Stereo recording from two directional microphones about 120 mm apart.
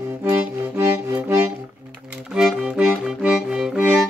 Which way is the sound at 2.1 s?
5° right (ahead or behind).